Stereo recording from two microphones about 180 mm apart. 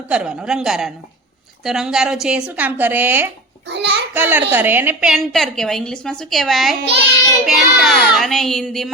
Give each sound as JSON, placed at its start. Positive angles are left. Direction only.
{"t": 0.1, "sound": "a woman's voice", "side_deg": -5}
{"t": 3.7, "sound": "a child's voice", "side_deg": -70}
{"t": 4.1, "sound": "a woman's voice", "side_deg": -10}
{"t": 6.7, "sound": "a child's voice", "side_deg": -70}
{"t": 7.4, "sound": "a woman's voice", "side_deg": 0}